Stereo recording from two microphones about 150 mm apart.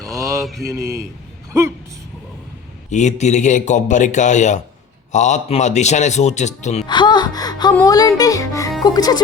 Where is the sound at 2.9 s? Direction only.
50° left (ahead or behind).